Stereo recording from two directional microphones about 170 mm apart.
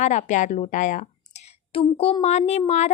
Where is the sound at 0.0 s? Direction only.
45° left (ahead or behind).